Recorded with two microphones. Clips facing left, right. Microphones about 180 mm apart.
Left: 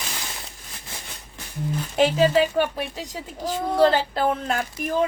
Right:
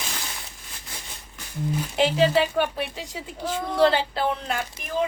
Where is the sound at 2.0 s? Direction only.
45° left (ahead or behind).